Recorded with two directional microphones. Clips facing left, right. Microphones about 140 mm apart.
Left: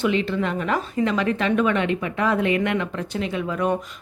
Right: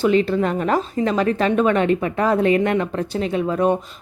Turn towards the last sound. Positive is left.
turn(degrees=-30)  # may be behind; listen again after turning